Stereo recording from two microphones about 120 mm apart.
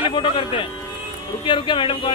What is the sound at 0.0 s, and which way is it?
A man's voice, 45° left (ahead or behind).